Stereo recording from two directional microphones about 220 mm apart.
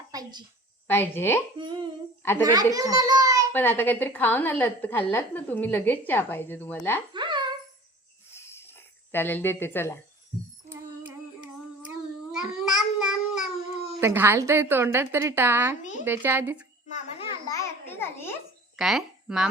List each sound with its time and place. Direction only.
0.1 s a sound: 20° right (ahead or behind)
0.9 s a woman's voice: 10° left (ahead or behind)
1.5 s a child's voice: 20° right (ahead or behind)
3.5 s a woman's voice: 10° left (ahead or behind)
7.1 s a sound: 20° right (ahead or behind)
8.3 s a sound: 10° left (ahead or behind)
10.7 s female singing: 10° right (ahead or behind)
11.9 s babbling: 5° right (ahead or behind)
14.0 s a woman's voice: 10° right (ahead or behind)
15.8 s speech: 35° left (ahead or behind)
16.0 s a woman's voice: 10° right (ahead or behind)
17.4 s babbling: 15° left (ahead or behind)
18.8 s speech: centre (ahead or behind)